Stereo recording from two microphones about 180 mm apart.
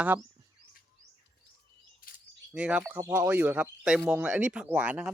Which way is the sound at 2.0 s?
55° left (ahead or behind).